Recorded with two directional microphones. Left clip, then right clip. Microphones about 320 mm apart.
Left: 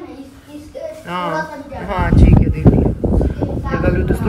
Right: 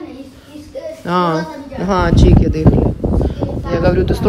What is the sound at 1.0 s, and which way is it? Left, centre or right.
A child's voice, right.